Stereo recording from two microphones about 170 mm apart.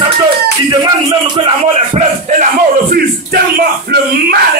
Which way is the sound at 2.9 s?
65° right (ahead or behind).